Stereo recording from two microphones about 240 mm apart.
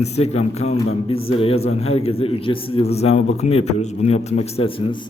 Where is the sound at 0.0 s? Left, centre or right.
Left.